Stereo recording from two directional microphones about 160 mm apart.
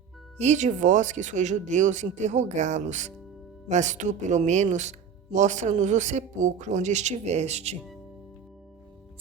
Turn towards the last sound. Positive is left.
turn(degrees=-45)  # may be behind; listen again after turning